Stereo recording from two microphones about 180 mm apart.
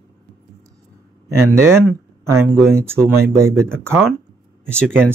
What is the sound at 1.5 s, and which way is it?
Speech, 15° right (ahead or behind).